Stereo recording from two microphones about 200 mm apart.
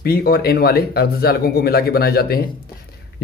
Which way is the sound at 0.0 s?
50° left (ahead or behind).